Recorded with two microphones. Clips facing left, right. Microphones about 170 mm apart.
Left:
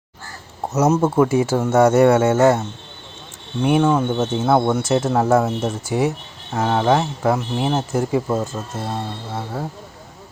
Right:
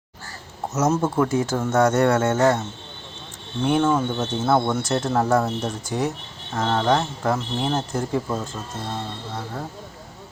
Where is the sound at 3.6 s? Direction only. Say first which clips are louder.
Left 3 dB; 10° left (ahead or behind).